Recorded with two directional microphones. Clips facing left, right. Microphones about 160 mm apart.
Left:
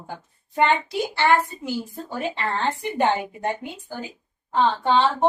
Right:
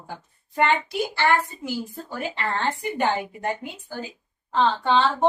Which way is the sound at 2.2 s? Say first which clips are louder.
Left 3 dB; 25° left (ahead or behind).